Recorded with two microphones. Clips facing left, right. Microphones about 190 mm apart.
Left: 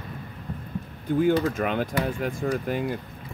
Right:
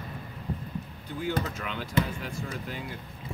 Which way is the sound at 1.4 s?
55° left (ahead or behind).